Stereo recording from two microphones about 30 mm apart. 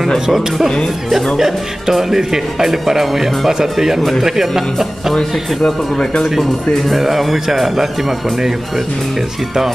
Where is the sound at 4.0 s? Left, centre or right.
Centre.